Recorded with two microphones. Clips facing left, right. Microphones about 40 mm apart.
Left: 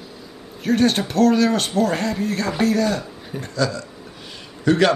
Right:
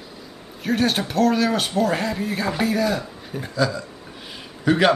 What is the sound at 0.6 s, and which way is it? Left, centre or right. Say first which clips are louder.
Speech: left 3 dB; centre.